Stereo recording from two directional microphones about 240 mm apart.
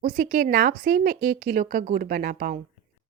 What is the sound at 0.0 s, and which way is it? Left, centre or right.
Speech, right.